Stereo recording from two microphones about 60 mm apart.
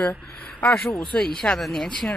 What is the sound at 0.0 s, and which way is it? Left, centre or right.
Speech, left.